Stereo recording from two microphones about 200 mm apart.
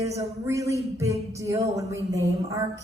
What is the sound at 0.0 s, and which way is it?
Speech, 15° right (ahead or behind).